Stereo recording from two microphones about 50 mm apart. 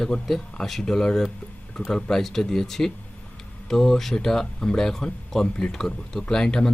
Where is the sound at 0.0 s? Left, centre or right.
Centre.